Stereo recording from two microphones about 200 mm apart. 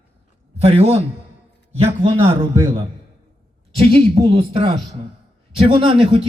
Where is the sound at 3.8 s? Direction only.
30° right (ahead or behind).